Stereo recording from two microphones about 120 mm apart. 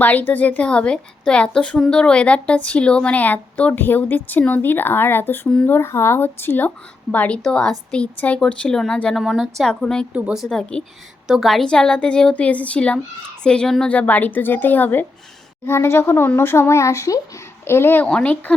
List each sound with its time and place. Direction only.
0.0 s a woman's voice: 15° left (ahead or behind)
10.1 s speech: 10° right (ahead or behind)
10.4 s a woman's voice: 5° left (ahead or behind)